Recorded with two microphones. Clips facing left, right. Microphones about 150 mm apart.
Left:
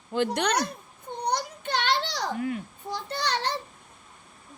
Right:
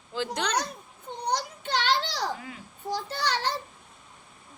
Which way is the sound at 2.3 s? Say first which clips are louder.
Left 12 dB; 55° left (ahead or behind).